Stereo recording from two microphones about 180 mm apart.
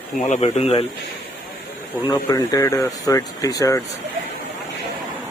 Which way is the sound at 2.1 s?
20° left (ahead or behind).